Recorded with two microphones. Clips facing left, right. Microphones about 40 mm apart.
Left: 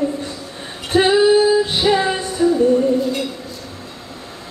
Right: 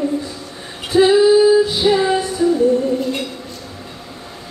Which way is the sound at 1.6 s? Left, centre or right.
Left.